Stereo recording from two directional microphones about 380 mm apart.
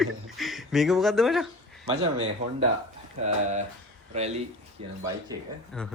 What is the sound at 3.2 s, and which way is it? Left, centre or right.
Speech, centre.